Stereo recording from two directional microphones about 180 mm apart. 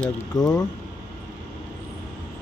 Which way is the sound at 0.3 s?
20° left (ahead or behind).